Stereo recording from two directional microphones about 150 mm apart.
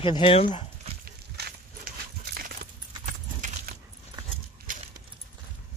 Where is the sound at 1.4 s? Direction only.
75° right (ahead or behind).